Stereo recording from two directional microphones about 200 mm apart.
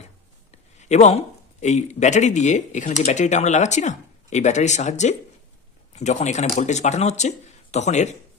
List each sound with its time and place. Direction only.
0.7 s speech: 35° left (ahead or behind)